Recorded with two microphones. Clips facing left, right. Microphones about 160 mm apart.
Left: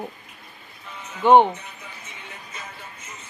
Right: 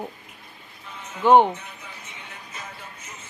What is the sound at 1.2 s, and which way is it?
Speech, centre (ahead or behind).